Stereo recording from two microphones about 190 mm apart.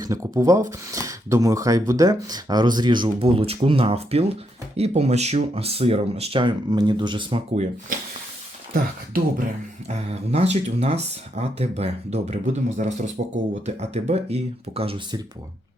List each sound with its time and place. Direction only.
0.0 s speech: 15° right (ahead or behind)
9.1 s speech: 50° right (ahead or behind)
9.9 s speech: 35° right (ahead or behind)